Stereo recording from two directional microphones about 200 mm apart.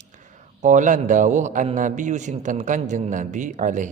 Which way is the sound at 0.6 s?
40° right (ahead or behind).